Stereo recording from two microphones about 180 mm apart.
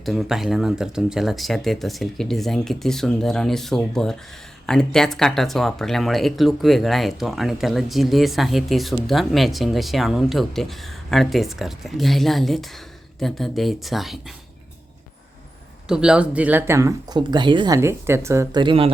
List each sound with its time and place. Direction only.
0.0 s speech: centre (ahead or behind)
15.9 s speech: 5° right (ahead or behind); by 17.7 s 25° right (ahead or behind)
17.7 s speech: 15° right (ahead or behind)